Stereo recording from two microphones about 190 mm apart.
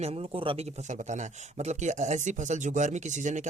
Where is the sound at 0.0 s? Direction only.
35° right (ahead or behind).